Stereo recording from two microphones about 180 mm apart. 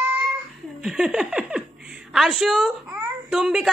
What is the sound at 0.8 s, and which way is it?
A child's voice, 5° right (ahead or behind).